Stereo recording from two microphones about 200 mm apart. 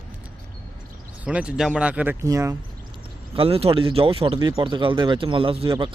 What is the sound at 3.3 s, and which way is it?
Speech, 30° right (ahead or behind).